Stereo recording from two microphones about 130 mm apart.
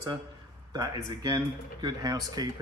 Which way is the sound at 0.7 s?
30° right (ahead or behind).